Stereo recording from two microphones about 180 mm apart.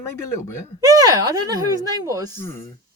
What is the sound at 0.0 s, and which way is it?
Speech, 15° left (ahead or behind).